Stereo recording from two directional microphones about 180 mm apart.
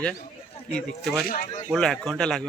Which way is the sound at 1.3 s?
50° left (ahead or behind).